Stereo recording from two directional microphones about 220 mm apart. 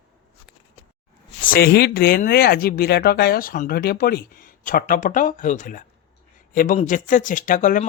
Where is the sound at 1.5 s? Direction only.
45° left (ahead or behind).